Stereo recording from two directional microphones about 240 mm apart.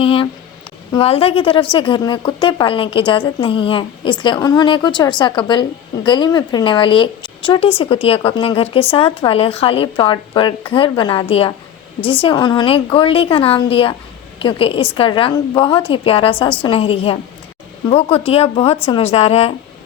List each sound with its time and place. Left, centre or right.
0.0 s a woman's voice: left